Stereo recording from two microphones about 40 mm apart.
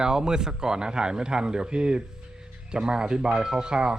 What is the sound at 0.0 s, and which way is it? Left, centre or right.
Speech, centre.